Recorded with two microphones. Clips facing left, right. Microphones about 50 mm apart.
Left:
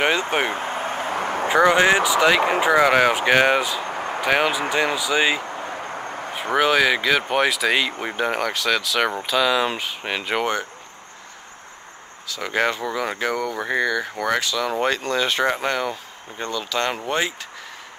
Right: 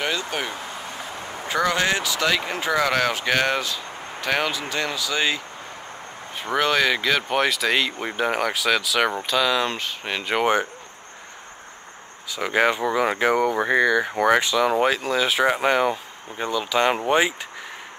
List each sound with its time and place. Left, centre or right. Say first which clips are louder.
0.0 s vehicle: left 6 dB; left
1.1 s a sound: left 10 dB; left
1.5 s speech: left 6 dB; left
3.9 s vehicle: left 8 dB; left
4.2 s speech: left 4 dB; centre
6.5 s speech: left 2 dB; centre
10.4 s speech: right 3 dB; centre
12.3 s speech: right 2 dB; centre